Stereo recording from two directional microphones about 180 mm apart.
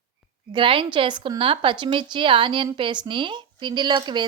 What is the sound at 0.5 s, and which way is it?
A woman's voice, 30° right (ahead or behind).